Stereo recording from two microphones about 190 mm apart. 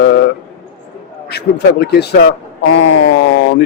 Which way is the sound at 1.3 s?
60° left (ahead or behind).